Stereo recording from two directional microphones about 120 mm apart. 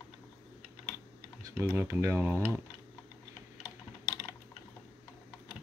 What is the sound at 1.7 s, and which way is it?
Speech, 20° right (ahead or behind).